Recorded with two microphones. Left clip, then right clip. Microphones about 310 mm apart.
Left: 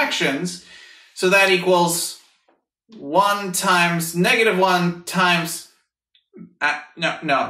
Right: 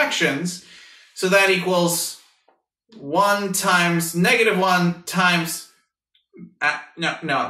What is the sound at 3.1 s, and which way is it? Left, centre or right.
Speech, left.